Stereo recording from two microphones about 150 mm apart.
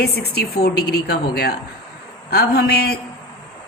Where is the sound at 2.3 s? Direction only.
90° left.